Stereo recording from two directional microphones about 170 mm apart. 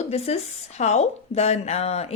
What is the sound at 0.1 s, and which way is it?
Speech, 40° left (ahead or behind).